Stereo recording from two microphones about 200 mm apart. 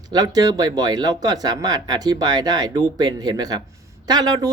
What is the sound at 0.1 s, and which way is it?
Speech, 20° right (ahead or behind).